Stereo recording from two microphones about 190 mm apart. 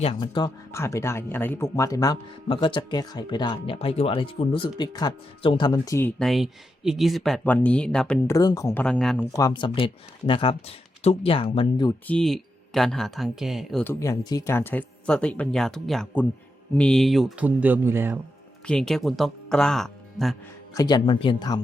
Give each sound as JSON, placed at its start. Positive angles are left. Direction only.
{"t": 0.0, "sound": "speech", "side_deg": 25}
{"t": 8.3, "sound": "speech", "side_deg": 15}
{"t": 8.8, "sound": "speech", "side_deg": 5}
{"t": 9.3, "sound": "speech", "side_deg": 20}
{"t": 12.0, "sound": "speech", "side_deg": 5}
{"t": 13.8, "sound": "speech", "side_deg": 15}
{"t": 18.6, "sound": "speech", "side_deg": 5}
{"t": 20.7, "sound": "speech", "side_deg": 20}